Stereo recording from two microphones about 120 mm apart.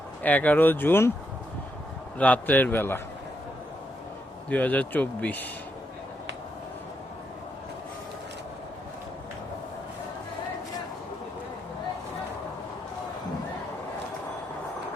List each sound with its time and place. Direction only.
0.2 s speech: 15° left (ahead or behind)
2.1 s speech: 10° left (ahead or behind)
4.4 s speech: 10° left (ahead or behind)